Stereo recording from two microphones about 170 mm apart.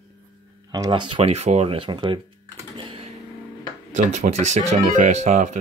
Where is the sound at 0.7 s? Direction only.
25° right (ahead or behind).